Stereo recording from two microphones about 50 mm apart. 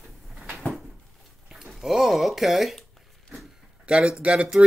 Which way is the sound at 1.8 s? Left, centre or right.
Centre.